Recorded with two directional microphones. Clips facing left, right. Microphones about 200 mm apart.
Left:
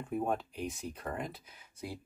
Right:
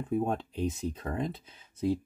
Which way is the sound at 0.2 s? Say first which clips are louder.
Right 4 dB; 20° right (ahead or behind).